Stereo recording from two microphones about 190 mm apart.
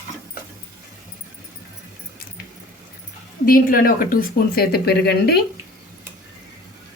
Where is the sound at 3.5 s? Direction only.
50° left (ahead or behind).